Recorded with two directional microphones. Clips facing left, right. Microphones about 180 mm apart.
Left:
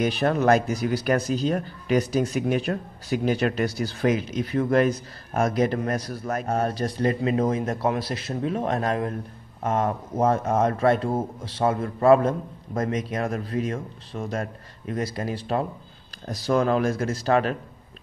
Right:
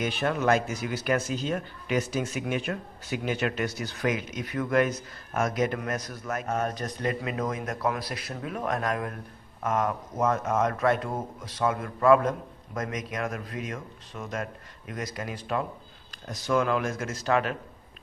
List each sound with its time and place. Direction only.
0.0 s speech: 40° left (ahead or behind)